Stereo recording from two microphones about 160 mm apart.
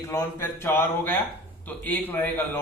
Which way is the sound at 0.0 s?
20° left (ahead or behind).